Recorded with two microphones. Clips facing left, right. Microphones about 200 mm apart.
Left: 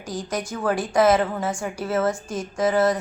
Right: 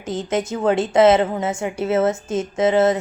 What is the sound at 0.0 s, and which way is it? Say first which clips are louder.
A woman's voice: right 6 dB; 25° right (ahead or behind).